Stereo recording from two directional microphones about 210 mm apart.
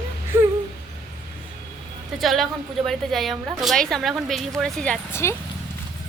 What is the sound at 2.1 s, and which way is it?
A woman's voice, centre (ahead or behind).